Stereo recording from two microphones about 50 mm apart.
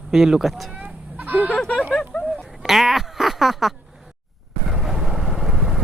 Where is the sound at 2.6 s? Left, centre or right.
Centre.